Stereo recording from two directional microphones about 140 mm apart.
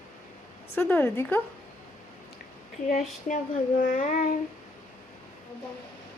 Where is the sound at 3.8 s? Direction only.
80° left.